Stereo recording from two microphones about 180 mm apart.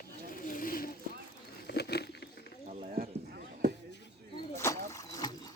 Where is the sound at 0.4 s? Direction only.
50° left (ahead or behind).